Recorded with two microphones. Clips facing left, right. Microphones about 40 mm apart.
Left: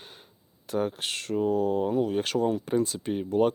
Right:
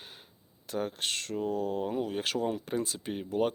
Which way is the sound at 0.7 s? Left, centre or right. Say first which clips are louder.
Left 4 dB; centre.